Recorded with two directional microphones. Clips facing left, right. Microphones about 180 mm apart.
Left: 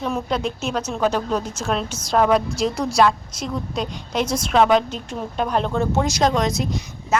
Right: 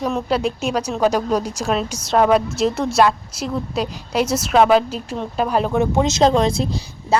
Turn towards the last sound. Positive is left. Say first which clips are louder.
# right 3 dB
turn(degrees=-30)  # may be behind; listen again after turning